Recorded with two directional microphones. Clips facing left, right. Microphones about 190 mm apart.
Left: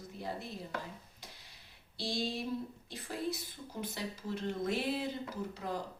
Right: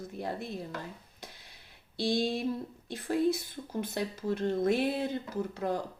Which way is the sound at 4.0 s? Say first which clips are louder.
Right 9 dB; 55° right (ahead or behind).